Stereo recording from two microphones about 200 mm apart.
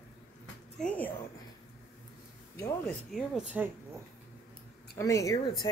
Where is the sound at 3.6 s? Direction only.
5° right (ahead or behind).